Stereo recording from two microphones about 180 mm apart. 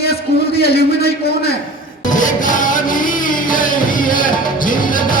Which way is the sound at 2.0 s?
45° left (ahead or behind).